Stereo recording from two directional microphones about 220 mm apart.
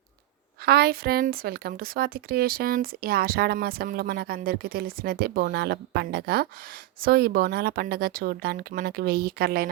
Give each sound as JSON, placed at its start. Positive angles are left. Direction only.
{"t": 0.6, "sound": "speech", "side_deg": -45}